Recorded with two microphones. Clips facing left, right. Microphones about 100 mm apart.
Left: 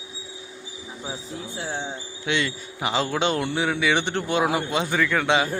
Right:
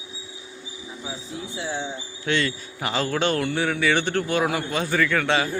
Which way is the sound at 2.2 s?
15° left (ahead or behind).